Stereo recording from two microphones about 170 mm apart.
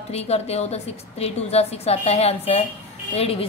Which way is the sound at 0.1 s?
40° left (ahead or behind).